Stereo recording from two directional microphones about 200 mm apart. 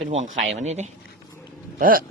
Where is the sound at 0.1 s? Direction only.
35° right (ahead or behind).